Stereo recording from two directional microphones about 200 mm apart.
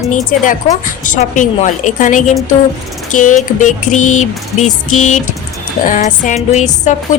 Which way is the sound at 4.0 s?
90° left.